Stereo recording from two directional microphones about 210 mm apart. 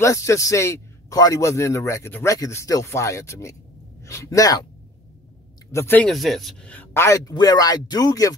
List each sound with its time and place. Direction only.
0.0 s a man's voice: 15° left (ahead or behind)
5.7 s a man's voice: 10° left (ahead or behind)